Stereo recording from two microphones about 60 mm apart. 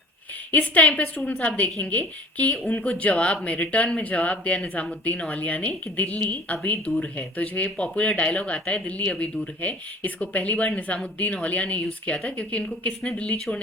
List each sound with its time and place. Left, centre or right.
0.5 s a woman's voice: left